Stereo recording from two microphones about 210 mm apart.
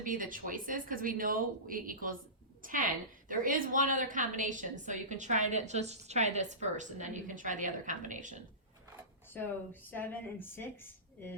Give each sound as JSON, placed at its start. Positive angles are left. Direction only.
{"t": 0.0, "sound": "a woman's voice", "side_deg": -40}
{"t": 9.9, "sound": "a woman's voice", "side_deg": 10}